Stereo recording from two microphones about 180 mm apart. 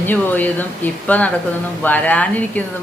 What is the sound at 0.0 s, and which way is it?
A woman's voice, 10° left (ahead or behind).